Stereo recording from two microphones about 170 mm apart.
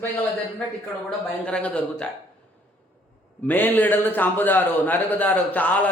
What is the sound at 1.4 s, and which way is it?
Speech, 5° left (ahead or behind).